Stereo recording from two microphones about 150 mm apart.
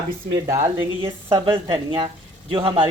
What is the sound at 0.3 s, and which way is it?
Speech, 20° right (ahead or behind).